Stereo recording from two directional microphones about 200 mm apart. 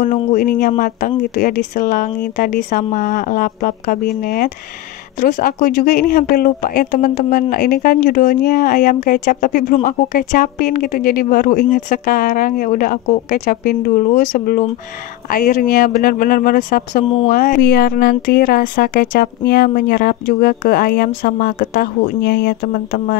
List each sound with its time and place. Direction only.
0.0 s speech: 40° left (ahead or behind)